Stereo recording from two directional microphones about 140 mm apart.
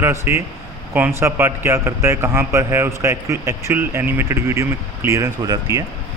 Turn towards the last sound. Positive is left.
turn(degrees=-25)  # may be behind; listen again after turning